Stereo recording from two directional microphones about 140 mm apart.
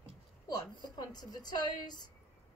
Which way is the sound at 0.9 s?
30° left (ahead or behind).